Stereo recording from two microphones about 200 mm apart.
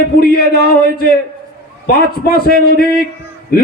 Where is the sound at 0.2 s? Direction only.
50° left (ahead or behind).